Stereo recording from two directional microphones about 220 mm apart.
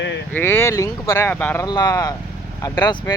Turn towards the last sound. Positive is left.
turn(degrees=15)  # may be behind; listen again after turning